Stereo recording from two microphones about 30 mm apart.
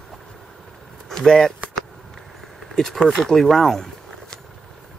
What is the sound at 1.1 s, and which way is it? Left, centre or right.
Speech, centre.